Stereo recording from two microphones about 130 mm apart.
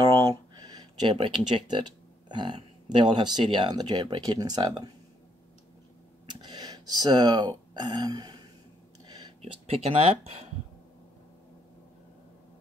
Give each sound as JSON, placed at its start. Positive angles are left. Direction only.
{"t": 0.0, "sound": "speech", "side_deg": -30}
{"t": 6.4, "sound": "speech", "side_deg": -30}
{"t": 9.0, "sound": "a sound", "side_deg": -35}
{"t": 9.4, "sound": "speech", "side_deg": -50}